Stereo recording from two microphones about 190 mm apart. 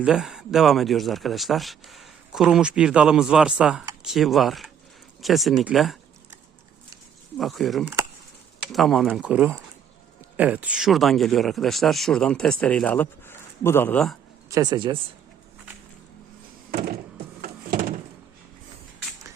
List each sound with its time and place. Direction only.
0.0 s speech: 5° right (ahead or behind)
7.3 s speech: centre (ahead or behind)
14.5 s speech: 20° right (ahead or behind)
16.7 s wood: 50° right (ahead or behind)